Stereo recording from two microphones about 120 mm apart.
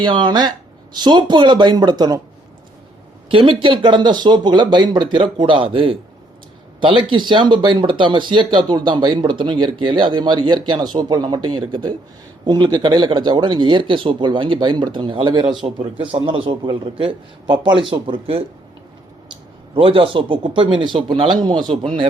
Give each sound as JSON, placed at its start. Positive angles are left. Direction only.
{"t": 0.0, "sound": "speech", "side_deg": -40}
{"t": 3.2, "sound": "speech", "side_deg": -50}
{"t": 19.7, "sound": "speech", "side_deg": -50}